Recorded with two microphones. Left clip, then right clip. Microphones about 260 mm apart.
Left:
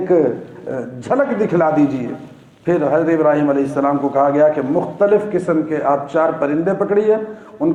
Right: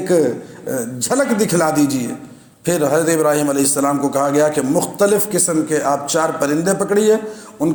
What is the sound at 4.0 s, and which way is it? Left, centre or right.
A man's voice, right.